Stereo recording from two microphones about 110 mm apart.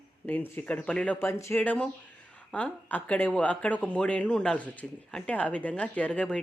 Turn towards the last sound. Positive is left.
turn(degrees=10)  # may be behind; listen again after turning